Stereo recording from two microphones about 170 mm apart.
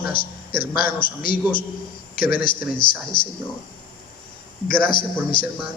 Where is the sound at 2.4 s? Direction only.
30° left (ahead or behind).